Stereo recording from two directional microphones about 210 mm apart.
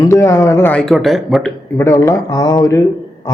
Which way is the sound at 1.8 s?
15° left (ahead or behind).